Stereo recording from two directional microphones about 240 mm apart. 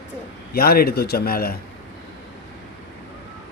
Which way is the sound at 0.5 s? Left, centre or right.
Left.